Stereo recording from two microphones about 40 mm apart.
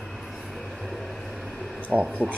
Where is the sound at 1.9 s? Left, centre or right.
Centre.